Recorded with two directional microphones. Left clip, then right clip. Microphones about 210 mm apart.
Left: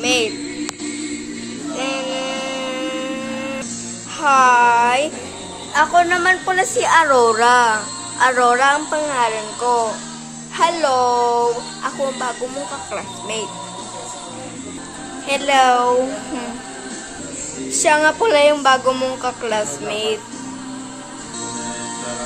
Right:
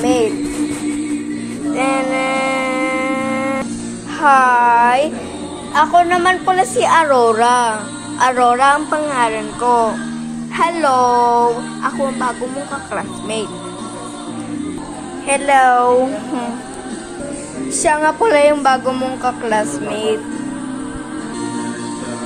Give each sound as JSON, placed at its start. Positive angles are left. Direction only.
{"t": 0.0, "sound": "music", "side_deg": 20}
{"t": 1.8, "sound": "music", "side_deg": 20}
{"t": 4.2, "sound": "a sound", "side_deg": 0}
{"t": 5.7, "sound": "a woman's voice", "side_deg": 5}
{"t": 15.2, "sound": "a woman's voice", "side_deg": 5}
{"t": 17.8, "sound": "music", "side_deg": 10}
{"t": 18.9, "sound": "music", "side_deg": 15}